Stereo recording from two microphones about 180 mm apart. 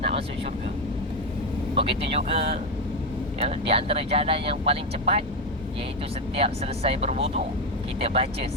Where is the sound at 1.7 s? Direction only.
30° right (ahead or behind).